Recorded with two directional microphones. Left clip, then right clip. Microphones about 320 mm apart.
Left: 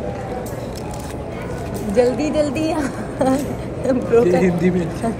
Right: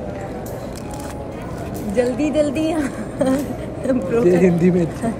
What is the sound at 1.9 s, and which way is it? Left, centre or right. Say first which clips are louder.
A woman's voice: left 2 dB; centre.